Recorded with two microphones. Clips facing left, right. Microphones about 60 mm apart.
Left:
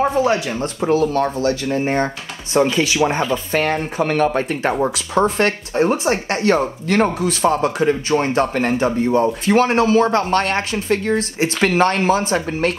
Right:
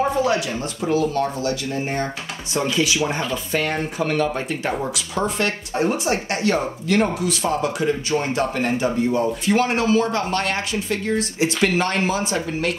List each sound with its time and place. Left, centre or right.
0.1 s a man's voice: left
4.8 s a man's voice: left